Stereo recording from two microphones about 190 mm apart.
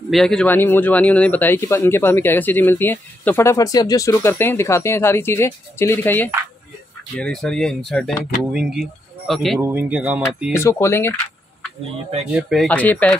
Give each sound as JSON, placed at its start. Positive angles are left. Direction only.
{"t": 0.1, "sound": "speech", "side_deg": 5}
{"t": 9.6, "sound": "speech", "side_deg": -10}
{"t": 10.5, "sound": "speech", "side_deg": 15}
{"t": 12.4, "sound": "speech", "side_deg": 0}